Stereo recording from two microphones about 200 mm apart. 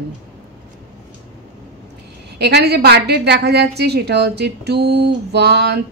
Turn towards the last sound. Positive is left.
turn(degrees=-55)  # may be behind; listen again after turning